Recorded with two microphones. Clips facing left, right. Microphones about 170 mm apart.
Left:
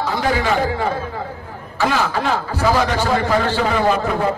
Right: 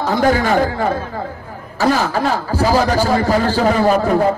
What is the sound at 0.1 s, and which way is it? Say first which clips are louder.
Music: right 6 dB; 45° right (ahead or behind).